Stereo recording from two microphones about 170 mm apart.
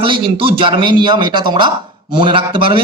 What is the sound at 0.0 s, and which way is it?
A man's voice, 30° right (ahead or behind).